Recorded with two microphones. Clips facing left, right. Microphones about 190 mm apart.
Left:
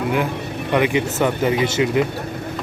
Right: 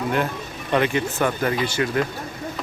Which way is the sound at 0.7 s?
15° left (ahead or behind).